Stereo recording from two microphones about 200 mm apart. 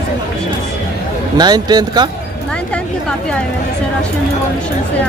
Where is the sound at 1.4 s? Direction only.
20° right (ahead or behind).